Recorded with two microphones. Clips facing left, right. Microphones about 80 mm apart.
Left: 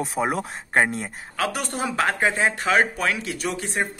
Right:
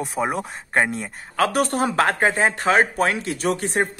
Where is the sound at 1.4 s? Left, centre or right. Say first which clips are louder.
Right 6 dB; right.